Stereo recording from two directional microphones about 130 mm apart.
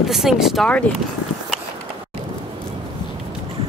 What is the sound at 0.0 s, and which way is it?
Speech, centre (ahead or behind).